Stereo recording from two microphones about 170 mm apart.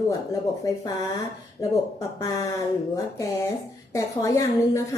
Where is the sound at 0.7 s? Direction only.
20° left (ahead or behind).